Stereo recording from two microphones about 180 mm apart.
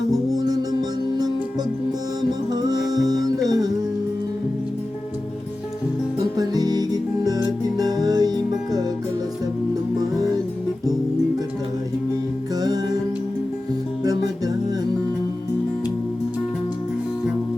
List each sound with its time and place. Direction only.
0.1 s music: 20° right (ahead or behind)
2.5 s music: 20° right (ahead or behind)
6.1 s music: 20° right (ahead or behind)
12.5 s music: 20° right (ahead or behind)
14.0 s music: 20° right (ahead or behind)